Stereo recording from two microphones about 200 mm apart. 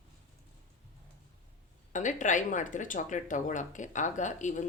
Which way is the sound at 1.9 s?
40° left (ahead or behind).